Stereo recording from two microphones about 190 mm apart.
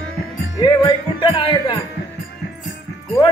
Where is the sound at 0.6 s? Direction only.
25° left (ahead or behind).